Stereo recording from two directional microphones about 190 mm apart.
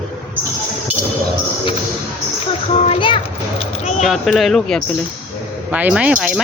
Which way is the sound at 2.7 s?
30° left (ahead or behind).